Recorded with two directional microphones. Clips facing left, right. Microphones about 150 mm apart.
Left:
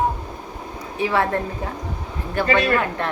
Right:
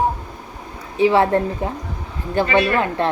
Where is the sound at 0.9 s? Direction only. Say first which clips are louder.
Right 6 dB; 25° right (ahead or behind).